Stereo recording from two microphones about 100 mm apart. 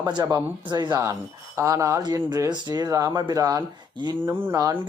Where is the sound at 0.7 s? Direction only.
45° right (ahead or behind).